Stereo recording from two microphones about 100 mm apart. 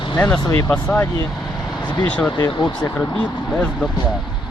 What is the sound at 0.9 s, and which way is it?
Speech, 25° left (ahead or behind).